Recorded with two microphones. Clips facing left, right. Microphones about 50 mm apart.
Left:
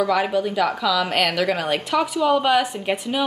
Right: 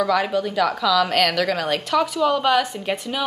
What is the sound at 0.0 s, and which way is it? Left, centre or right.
A woman's voice, centre.